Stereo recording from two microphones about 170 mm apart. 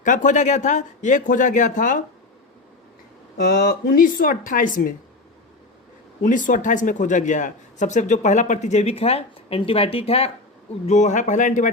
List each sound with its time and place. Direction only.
0.0 s speech: 50° left (ahead or behind)
3.3 s speech: 60° left (ahead or behind)
6.2 s speech: 50° left (ahead or behind)